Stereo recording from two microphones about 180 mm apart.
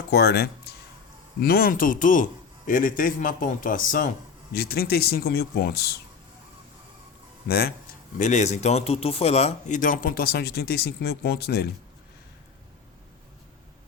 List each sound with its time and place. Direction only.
0.1 s speech: 60° left (ahead or behind); by 4.1 s 45° left (ahead or behind)
4.5 s speech: 60° left (ahead or behind)
7.4 s speech: 60° left (ahead or behind)
8.2 s speech: 40° left (ahead or behind); by 11.7 s 60° left (ahead or behind)